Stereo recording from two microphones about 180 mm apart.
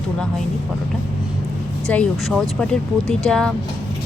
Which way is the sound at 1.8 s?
5° left (ahead or behind).